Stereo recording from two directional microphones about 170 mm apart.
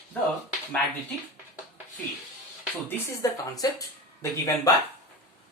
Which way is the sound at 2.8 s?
15° left (ahead or behind).